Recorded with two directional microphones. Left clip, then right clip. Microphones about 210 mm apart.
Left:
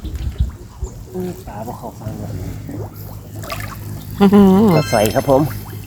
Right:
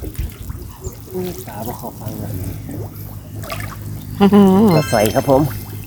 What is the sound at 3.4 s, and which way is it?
Water, 5° left (ahead or behind).